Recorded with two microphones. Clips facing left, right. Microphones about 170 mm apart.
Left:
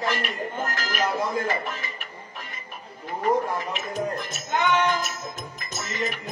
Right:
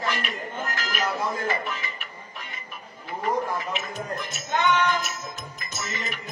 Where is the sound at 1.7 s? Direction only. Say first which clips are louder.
Even; 45° left (ahead or behind).